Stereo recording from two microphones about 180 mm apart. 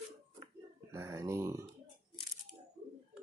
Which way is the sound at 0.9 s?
15° right (ahead or behind).